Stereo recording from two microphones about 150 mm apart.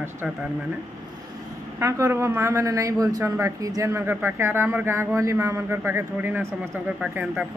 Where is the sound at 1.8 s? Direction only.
20° right (ahead or behind).